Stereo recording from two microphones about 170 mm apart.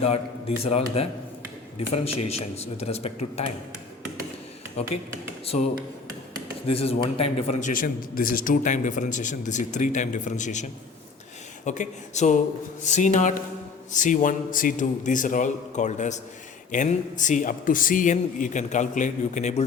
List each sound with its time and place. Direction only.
0.0 s a man's voice: 35° left (ahead or behind)
5.5 s a man's voice: 45° left (ahead or behind)
7.7 s speech: 55° left (ahead or behind)